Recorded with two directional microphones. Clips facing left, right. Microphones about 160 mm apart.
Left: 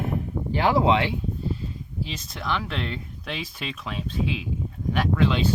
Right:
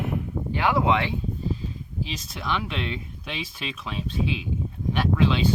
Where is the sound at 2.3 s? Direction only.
Centre (ahead or behind).